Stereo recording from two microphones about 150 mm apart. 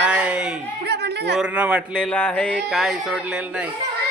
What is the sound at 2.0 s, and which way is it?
Speech, 10° left (ahead or behind).